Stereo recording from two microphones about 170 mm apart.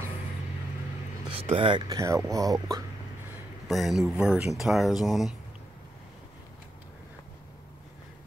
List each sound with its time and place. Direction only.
1.3 s speech: 35° right (ahead or behind)
3.6 s speech: centre (ahead or behind)